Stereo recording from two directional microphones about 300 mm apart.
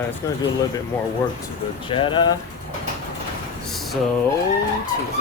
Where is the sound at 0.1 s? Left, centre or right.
Centre.